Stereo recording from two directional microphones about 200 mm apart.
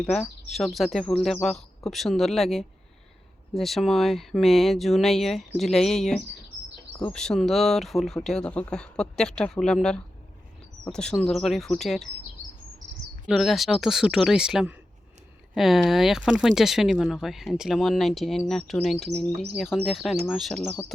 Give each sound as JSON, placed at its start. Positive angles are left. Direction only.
{"t": 0.0, "sound": "speech", "side_deg": 5}
{"t": 12.8, "sound": "chirp", "side_deg": -55}
{"t": 13.2, "sound": "speech", "side_deg": 0}